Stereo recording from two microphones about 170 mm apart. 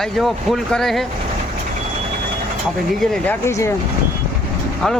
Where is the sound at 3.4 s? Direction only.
15° left (ahead or behind).